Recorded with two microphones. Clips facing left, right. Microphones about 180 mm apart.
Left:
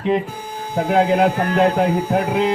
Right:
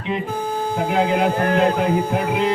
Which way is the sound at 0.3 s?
50° right (ahead or behind).